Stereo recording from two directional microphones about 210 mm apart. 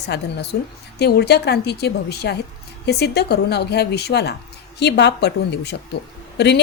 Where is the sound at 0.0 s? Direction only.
55° left (ahead or behind).